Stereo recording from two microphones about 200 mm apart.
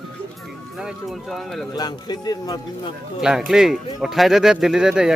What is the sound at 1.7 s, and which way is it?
Speech, 20° left (ahead or behind).